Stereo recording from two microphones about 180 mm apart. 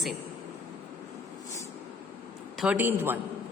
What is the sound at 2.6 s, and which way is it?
Speech, 10° right (ahead or behind).